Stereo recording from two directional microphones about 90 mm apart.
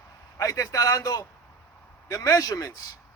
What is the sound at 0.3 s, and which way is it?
Speech, 40° left (ahead or behind).